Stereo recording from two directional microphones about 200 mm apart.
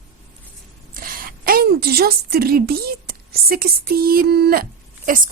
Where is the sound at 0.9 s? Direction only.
45° right (ahead or behind).